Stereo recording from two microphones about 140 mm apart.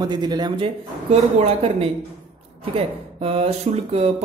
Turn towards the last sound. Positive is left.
turn(degrees=-45)  # may be behind; listen again after turning